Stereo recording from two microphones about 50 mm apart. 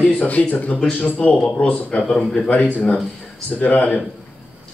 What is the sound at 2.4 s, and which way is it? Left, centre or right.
Speech, left.